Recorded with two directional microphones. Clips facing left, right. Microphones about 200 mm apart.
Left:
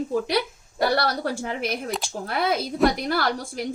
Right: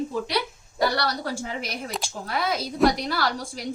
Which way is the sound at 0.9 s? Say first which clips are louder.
Left 3 dB; 55° left (ahead or behind).